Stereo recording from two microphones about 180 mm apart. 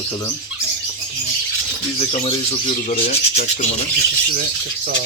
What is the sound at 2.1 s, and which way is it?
Speech, 35° left (ahead or behind).